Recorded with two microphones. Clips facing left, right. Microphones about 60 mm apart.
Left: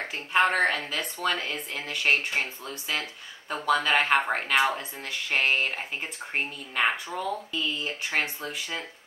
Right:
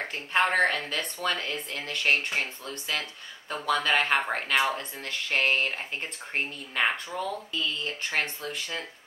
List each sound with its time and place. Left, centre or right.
0.0 s speech: centre